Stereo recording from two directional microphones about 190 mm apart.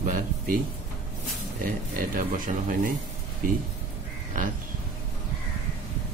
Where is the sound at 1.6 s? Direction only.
45° right (ahead or behind).